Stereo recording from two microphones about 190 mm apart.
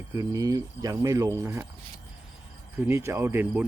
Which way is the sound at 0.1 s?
20° right (ahead or behind).